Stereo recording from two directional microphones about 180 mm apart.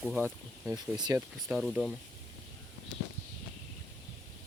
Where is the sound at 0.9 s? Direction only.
25° right (ahead or behind).